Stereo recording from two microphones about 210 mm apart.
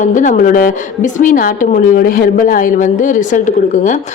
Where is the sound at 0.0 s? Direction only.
35° left (ahead or behind).